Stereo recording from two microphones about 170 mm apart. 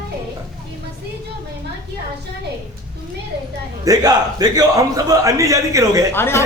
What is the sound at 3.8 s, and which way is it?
A man's voice, 20° right (ahead or behind).